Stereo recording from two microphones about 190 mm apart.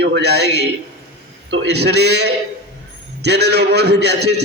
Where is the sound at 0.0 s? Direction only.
60° right (ahead or behind).